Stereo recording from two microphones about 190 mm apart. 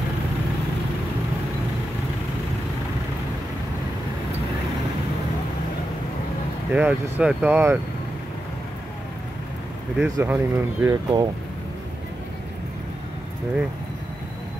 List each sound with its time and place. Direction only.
6.7 s speech: 5° right (ahead or behind)
10.0 s speech: 15° right (ahead or behind)
10.9 s speech: 20° right (ahead or behind)